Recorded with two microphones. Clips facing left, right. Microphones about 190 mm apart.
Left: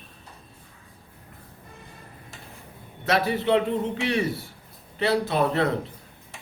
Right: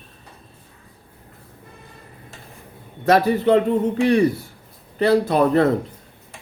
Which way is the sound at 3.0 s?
45° right (ahead or behind).